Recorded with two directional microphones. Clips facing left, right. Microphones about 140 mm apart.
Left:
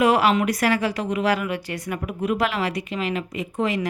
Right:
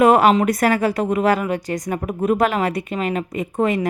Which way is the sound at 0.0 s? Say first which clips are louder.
Right 5 dB; 50° right (ahead or behind).